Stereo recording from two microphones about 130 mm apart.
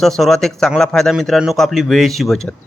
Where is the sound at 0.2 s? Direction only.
Centre (ahead or behind).